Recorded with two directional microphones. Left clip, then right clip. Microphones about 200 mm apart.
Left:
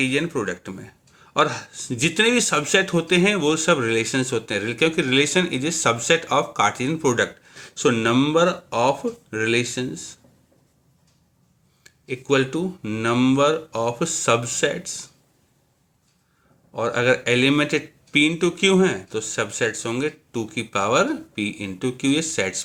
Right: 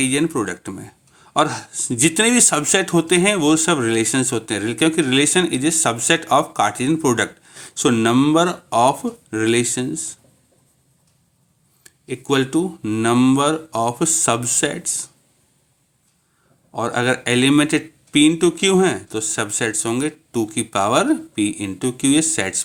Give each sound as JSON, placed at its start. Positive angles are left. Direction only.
{"t": 0.0, "sound": "speech", "side_deg": -45}
{"t": 11.8, "sound": "speech", "side_deg": -45}
{"t": 16.7, "sound": "speech", "side_deg": -45}